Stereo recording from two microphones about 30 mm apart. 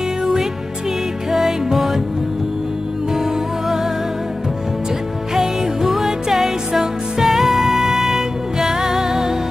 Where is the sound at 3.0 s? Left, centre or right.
Centre.